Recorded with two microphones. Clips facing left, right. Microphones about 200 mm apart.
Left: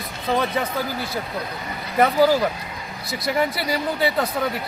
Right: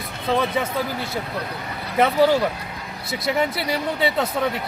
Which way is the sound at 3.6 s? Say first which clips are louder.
Even; centre (ahead or behind).